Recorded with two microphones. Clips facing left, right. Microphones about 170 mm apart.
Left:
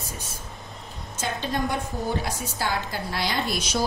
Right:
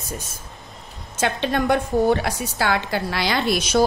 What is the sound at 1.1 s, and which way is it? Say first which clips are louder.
A woman's voice: right 6 dB; 70° right (ahead or behind).